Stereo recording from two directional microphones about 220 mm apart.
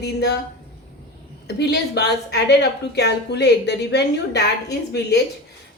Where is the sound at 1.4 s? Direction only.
50° left (ahead or behind).